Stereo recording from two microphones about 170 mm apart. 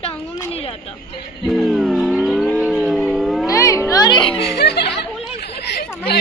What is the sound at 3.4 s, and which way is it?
Music, 20° left (ahead or behind).